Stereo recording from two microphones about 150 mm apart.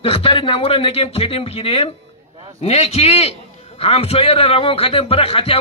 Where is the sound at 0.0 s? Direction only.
40° left (ahead or behind).